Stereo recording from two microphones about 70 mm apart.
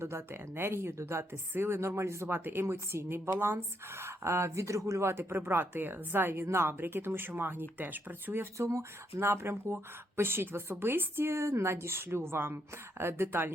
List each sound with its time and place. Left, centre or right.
0.0 s speech: right
8.5 s speech: right